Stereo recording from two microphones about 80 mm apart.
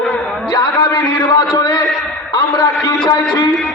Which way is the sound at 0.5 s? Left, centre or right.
Left.